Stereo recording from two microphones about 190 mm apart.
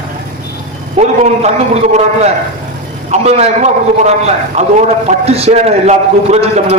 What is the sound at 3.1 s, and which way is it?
A man's voice, 35° right (ahead or behind).